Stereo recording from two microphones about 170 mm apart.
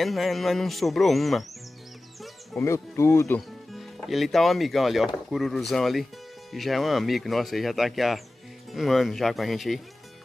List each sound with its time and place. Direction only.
0.0 s speech: centre (ahead or behind)
2.6 s speech: 15° left (ahead or behind)
3.3 s speech: centre (ahead or behind)